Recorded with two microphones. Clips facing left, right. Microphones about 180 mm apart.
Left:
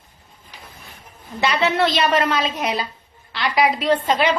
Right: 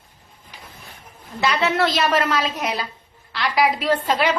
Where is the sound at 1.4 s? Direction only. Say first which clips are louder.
Left 1 dB; centre (ahead or behind).